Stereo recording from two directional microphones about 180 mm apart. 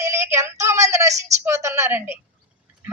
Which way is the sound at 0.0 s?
15° right (ahead or behind).